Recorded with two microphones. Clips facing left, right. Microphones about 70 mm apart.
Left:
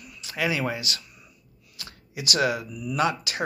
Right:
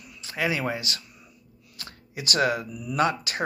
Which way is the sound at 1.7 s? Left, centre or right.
Right.